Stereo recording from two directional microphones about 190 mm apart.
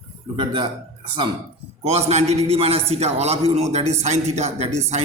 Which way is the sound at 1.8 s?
35° right (ahead or behind).